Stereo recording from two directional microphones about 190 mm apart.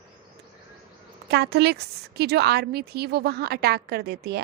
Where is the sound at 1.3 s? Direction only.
60° right (ahead or behind).